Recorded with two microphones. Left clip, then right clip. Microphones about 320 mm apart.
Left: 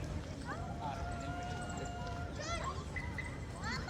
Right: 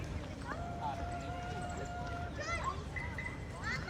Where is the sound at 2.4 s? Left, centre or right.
Centre.